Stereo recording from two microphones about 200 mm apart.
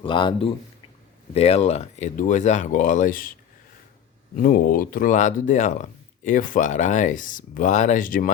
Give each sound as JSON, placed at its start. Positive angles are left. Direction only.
{"t": 0.0, "sound": "speech", "side_deg": 25}
{"t": 4.4, "sound": "speech", "side_deg": 45}